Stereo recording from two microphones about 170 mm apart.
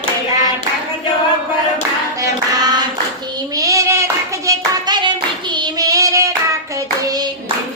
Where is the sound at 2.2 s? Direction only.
25° right (ahead or behind).